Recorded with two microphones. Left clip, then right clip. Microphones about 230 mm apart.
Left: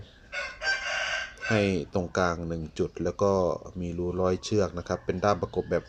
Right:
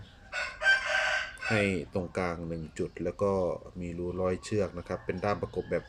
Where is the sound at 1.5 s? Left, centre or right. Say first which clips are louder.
Left 3 dB; left.